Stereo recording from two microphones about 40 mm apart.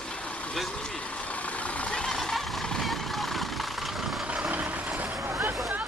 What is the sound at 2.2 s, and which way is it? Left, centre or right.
Vehicle, centre.